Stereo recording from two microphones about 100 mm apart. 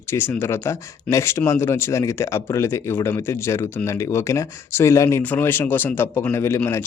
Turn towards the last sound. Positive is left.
turn(degrees=25)  # may be behind; listen again after turning